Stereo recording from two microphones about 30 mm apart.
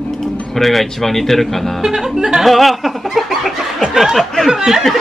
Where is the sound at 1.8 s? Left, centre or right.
Centre.